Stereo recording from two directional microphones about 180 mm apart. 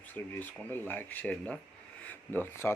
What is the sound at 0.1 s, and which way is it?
Speech, 10° left (ahead or behind).